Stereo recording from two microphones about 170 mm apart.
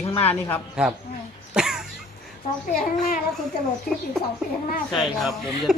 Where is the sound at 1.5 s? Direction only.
5° right (ahead or behind).